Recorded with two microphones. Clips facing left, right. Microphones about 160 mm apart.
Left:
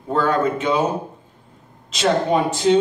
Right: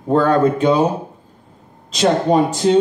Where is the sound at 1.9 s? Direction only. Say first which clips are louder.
Right 3 dB; 40° right (ahead or behind).